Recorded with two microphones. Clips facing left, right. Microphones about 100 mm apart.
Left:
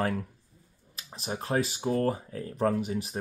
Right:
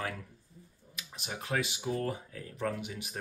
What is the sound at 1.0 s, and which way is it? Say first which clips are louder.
Speech: left 6 dB; 35° left (ahead or behind).